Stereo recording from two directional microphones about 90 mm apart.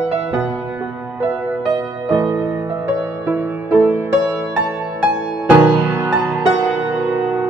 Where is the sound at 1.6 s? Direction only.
35° right (ahead or behind).